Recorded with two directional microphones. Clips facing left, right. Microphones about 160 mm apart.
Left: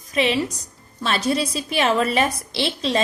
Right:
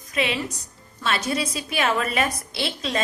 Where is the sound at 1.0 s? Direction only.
30° left (ahead or behind).